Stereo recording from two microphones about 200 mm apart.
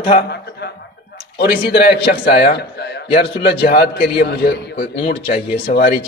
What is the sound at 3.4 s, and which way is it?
Speech, 55° left (ahead or behind).